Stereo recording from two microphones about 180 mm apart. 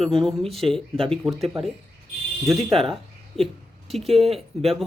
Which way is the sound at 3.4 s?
Centre (ahead or behind).